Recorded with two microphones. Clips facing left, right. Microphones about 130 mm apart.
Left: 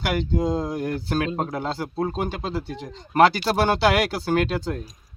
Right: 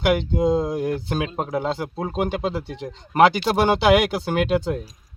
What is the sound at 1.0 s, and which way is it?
Speech, 15° right (ahead or behind).